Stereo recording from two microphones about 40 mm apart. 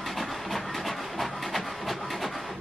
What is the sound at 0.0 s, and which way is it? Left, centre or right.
Printer, centre.